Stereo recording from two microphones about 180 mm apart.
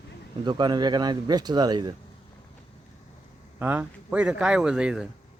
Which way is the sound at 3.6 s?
10° right (ahead or behind).